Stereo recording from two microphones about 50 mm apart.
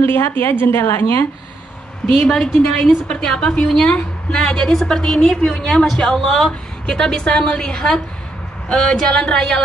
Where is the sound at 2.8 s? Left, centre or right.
Centre.